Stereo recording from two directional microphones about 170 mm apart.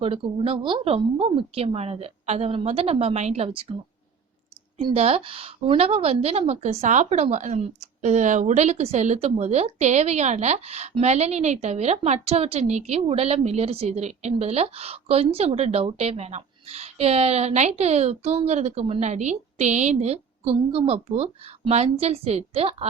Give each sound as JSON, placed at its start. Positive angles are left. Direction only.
{"t": 0.0, "sound": "a woman's voice", "side_deg": -35}
{"t": 4.8, "sound": "a woman's voice", "side_deg": -30}